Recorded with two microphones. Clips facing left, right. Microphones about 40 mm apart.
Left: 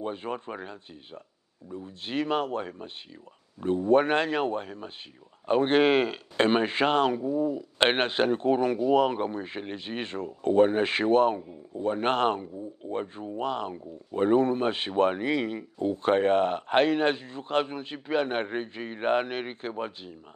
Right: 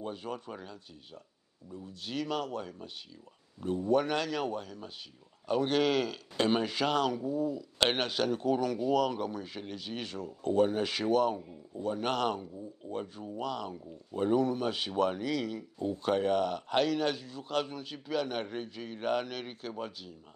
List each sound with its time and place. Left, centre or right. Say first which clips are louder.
0.0 s speech: left 6 dB; left